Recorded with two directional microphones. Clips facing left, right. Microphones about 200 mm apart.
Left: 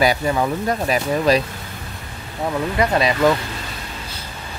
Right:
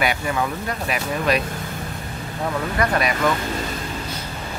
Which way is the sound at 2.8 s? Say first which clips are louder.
Left 3 dB; 25° left (ahead or behind).